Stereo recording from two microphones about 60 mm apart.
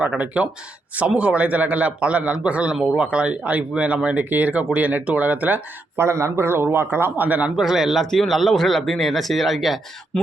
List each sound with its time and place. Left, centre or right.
0.0 s speech: centre
6.0 s a man's voice: right
7.5 s speech: centre